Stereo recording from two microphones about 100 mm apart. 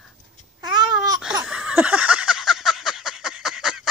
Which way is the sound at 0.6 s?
45° right (ahead or behind).